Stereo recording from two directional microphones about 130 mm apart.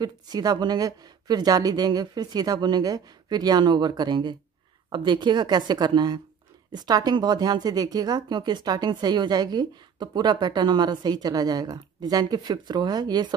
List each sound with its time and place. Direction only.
0.0 s speech: 30° right (ahead or behind)